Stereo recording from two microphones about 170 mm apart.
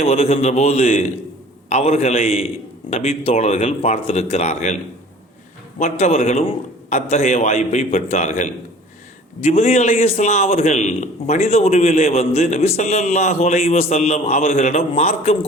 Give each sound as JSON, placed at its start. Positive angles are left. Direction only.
{"t": 0.0, "sound": "a man's voice", "side_deg": 35}
{"t": 5.8, "sound": "a man's voice", "side_deg": 40}